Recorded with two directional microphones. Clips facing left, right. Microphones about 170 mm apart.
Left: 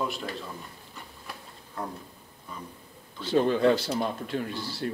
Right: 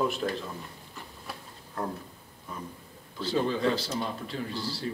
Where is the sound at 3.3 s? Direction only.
55° left (ahead or behind).